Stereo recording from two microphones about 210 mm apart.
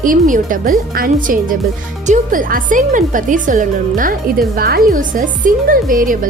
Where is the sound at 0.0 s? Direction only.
40° right (ahead or behind).